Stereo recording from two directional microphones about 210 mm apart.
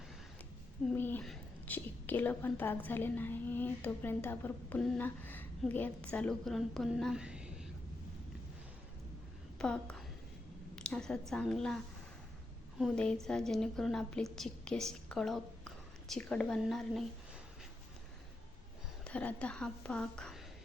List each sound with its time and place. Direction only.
0.9 s a woman's voice: 10° left (ahead or behind)
9.6 s a woman's voice: 5° left (ahead or behind)
12.8 s a woman's voice: 5° left (ahead or behind)
19.0 s a woman's voice: 5° left (ahead or behind)